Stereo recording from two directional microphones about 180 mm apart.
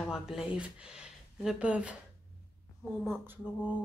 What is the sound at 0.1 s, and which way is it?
Speech, centre (ahead or behind).